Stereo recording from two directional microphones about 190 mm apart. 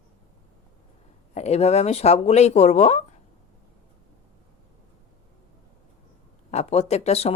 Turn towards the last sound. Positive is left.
turn(degrees=35)  # may be behind; listen again after turning